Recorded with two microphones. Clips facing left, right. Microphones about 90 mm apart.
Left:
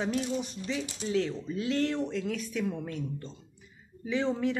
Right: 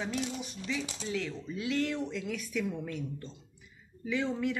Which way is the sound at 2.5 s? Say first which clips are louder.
Left 1 dB; 25° left (ahead or behind).